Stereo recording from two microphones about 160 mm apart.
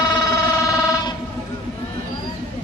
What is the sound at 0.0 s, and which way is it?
Music, 25° left (ahead or behind).